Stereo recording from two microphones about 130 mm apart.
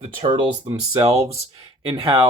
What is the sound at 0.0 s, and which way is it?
Speech, 45° right (ahead or behind).